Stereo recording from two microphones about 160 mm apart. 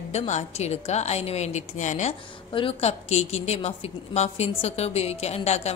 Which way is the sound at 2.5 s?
35° left (ahead or behind).